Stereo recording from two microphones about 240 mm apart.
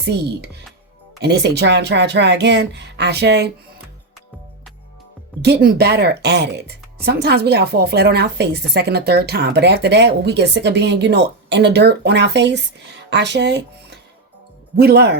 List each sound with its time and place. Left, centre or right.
0.0 s speech: right
5.4 s speech: right